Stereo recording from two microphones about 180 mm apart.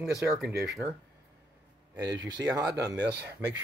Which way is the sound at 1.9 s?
20° right (ahead or behind).